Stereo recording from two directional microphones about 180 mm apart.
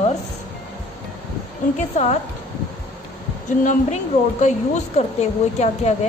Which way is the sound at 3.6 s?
45° left (ahead or behind).